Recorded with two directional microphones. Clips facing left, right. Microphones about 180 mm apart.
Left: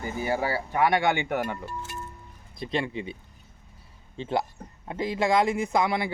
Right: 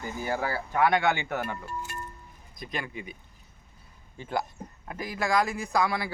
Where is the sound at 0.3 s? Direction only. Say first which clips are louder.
Even; 15° left (ahead or behind).